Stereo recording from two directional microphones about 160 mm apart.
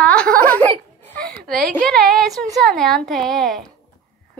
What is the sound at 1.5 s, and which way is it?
A woman's voice, 5° left (ahead or behind).